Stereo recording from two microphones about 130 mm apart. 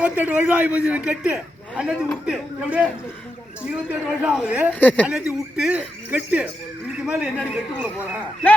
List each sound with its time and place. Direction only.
0.0 s speech: 10° right (ahead or behind)
4.7 s a woman's voice: 10° left (ahead or behind)
5.0 s speech: 10° right (ahead or behind)